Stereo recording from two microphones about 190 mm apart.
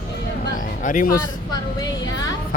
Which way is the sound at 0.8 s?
45° left (ahead or behind).